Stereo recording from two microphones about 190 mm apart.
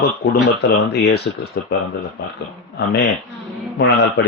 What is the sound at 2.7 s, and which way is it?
Speech, 65° left (ahead or behind).